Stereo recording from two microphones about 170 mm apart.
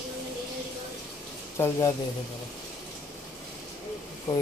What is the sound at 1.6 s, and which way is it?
Speech, 15° left (ahead or behind).